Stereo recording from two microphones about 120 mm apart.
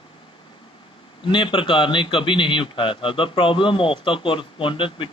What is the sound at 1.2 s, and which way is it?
A man's voice, 45° left (ahead or behind).